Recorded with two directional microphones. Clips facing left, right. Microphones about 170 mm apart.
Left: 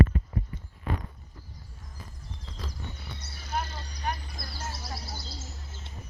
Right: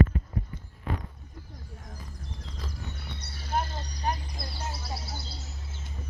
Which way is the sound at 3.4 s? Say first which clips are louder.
Right 3 dB; 30° right (ahead or behind).